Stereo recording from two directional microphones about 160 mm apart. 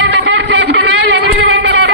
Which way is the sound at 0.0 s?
90° right.